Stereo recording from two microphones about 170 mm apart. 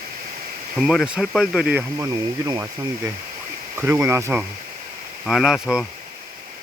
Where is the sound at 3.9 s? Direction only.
15° right (ahead or behind).